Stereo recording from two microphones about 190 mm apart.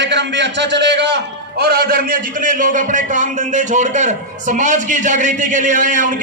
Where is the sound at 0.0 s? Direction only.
65° right (ahead or behind).